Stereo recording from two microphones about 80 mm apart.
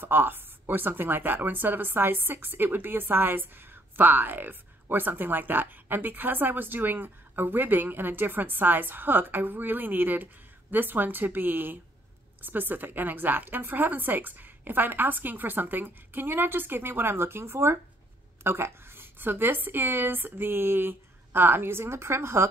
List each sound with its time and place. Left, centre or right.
0.0 s speech: right